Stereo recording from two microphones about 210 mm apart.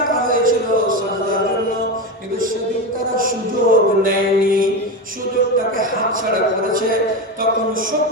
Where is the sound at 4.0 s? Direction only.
40° right (ahead or behind).